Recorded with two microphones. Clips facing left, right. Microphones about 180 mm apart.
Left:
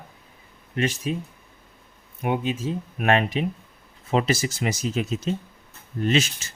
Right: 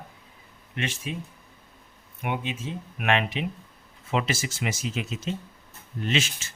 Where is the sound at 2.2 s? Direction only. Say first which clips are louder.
Left 6 dB; 40° left (ahead or behind).